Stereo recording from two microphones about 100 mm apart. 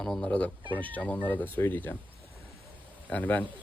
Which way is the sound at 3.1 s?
15° left (ahead or behind).